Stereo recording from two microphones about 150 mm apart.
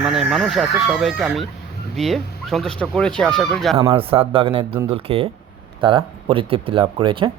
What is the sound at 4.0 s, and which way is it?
Speech, 40° right (ahead or behind).